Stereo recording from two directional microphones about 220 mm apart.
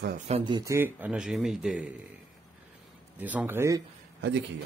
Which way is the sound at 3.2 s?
5° right (ahead or behind).